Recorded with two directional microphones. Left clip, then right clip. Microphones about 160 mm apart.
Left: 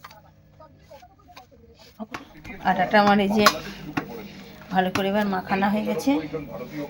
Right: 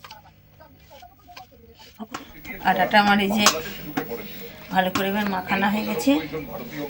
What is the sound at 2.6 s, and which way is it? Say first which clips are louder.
Speech: right 1 dB; 35° left (ahead or behind).